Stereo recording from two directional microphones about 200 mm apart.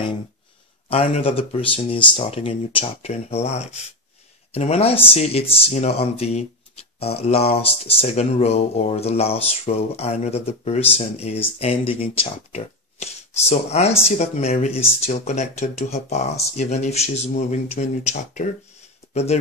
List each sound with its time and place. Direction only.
0.8 s speech: 30° left (ahead or behind)